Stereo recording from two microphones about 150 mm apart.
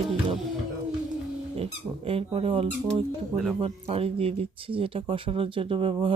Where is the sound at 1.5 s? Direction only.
40° right (ahead or behind).